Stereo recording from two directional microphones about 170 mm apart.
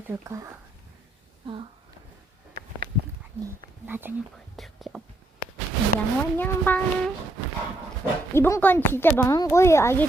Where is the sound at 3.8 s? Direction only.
10° right (ahead or behind).